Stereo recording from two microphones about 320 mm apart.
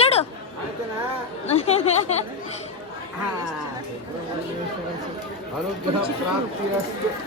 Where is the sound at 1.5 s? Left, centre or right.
Centre.